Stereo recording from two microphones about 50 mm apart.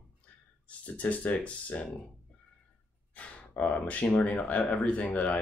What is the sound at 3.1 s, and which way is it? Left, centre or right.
Speech, left.